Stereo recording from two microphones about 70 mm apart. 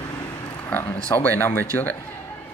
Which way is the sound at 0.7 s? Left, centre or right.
Left.